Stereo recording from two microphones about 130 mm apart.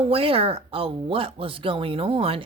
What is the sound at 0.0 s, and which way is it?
Speech, 45° right (ahead or behind).